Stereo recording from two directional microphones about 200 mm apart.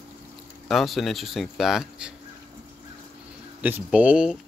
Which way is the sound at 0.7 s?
Centre (ahead or behind).